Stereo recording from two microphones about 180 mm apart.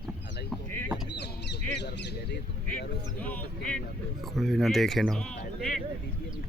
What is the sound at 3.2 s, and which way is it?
Speech, 10° left (ahead or behind).